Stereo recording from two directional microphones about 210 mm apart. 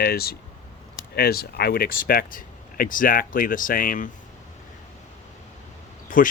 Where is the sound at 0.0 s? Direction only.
45° left (ahead or behind).